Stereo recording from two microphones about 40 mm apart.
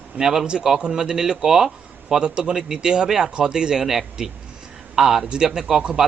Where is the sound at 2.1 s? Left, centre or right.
Centre.